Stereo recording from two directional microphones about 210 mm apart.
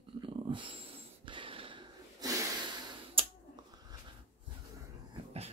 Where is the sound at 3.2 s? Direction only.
25° right (ahead or behind).